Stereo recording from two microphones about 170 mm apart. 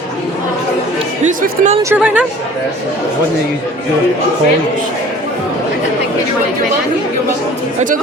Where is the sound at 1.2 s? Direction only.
45° right (ahead or behind).